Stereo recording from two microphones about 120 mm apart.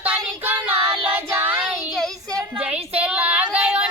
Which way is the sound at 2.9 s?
10° right (ahead or behind).